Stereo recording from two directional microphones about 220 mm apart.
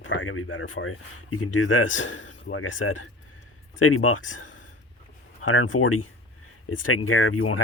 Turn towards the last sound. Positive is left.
turn(degrees=65)  # may be behind; listen again after turning